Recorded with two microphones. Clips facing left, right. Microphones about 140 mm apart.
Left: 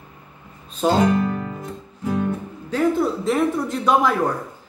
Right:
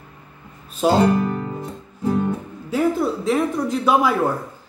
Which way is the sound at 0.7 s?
10° right (ahead or behind).